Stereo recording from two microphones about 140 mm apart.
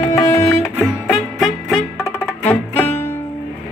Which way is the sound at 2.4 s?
15° left (ahead or behind).